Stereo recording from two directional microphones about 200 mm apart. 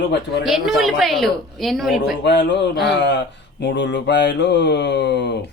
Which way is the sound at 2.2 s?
60° left (ahead or behind).